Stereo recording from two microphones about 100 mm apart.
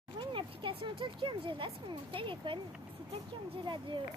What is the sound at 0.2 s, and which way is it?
Speech, 55° right (ahead or behind).